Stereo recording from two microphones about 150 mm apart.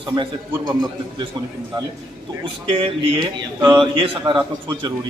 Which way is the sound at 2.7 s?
35° right (ahead or behind).